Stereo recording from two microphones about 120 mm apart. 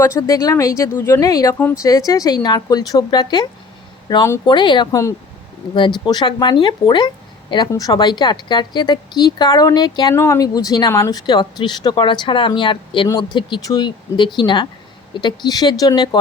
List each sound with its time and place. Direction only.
0.0 s speech: 30° left (ahead or behind)
4.9 s speech: 25° left (ahead or behind)
5.7 s speech: 40° left (ahead or behind)
10.2 s speech: 25° left (ahead or behind)